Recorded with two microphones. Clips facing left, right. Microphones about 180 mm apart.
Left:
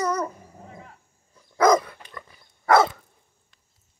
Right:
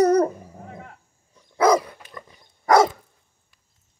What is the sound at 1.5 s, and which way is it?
Dog, 10° right (ahead or behind).